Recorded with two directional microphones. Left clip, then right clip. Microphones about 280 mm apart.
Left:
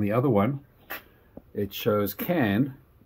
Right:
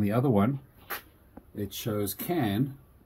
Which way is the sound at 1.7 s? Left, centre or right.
Centre.